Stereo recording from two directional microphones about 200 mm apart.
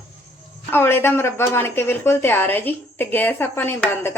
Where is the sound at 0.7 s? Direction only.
10° left (ahead or behind).